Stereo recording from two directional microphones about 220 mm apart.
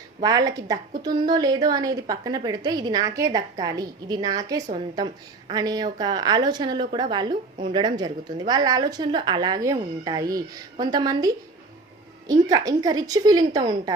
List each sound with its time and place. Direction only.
0.2 s a woman's voice: 15° right (ahead or behind)
12.3 s a woman's voice: 15° right (ahead or behind)